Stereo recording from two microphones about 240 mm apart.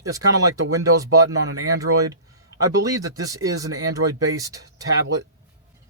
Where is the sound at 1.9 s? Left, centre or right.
Right.